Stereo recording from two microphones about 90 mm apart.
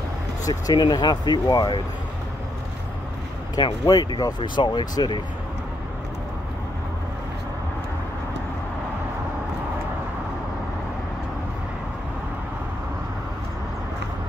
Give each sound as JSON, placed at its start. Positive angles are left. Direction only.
{"t": 0.5, "sound": "speech", "side_deg": 45}
{"t": 3.5, "sound": "speech", "side_deg": 45}